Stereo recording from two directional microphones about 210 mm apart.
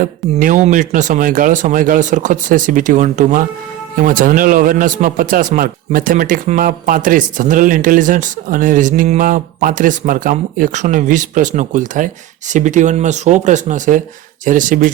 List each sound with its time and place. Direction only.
0.0 s speech: 40° right (ahead or behind)